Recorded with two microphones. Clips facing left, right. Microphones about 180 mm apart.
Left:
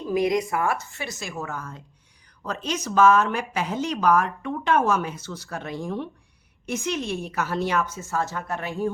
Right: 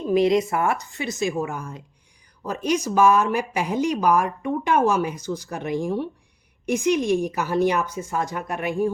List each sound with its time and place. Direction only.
0.0 s speech: 25° right (ahead or behind)